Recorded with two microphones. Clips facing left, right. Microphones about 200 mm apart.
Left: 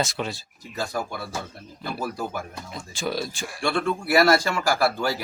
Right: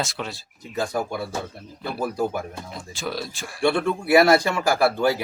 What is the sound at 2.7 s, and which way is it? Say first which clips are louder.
Speech: left 3 dB; centre (ahead or behind).